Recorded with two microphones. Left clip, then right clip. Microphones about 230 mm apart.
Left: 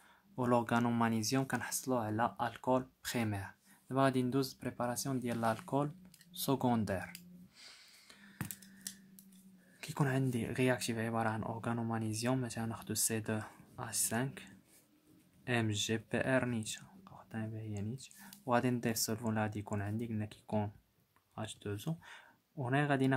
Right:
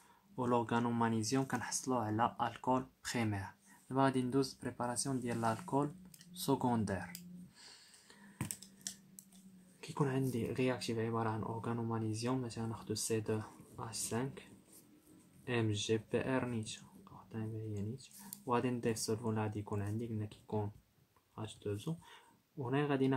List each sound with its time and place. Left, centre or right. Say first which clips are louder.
0.4 s speech: left 2 dB; left
9.8 s speech: left 1 dB; left